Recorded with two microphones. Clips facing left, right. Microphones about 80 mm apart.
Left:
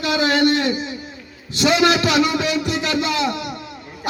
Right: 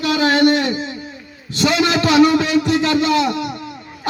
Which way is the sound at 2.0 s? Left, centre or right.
Right.